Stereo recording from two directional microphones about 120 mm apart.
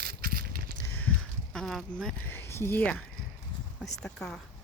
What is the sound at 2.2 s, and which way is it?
Speech, 20° left (ahead or behind).